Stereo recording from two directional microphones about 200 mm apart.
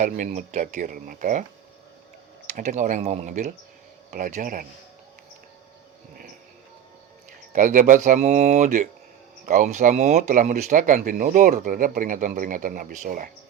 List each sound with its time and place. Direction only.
0.0 s speech: 40° right (ahead or behind)
2.6 s speech: 35° right (ahead or behind)
7.5 s speech: 40° right (ahead or behind)